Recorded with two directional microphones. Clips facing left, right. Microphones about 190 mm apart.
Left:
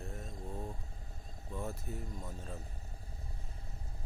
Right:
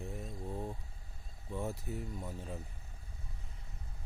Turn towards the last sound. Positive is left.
turn(degrees=-15)  # may be behind; listen again after turning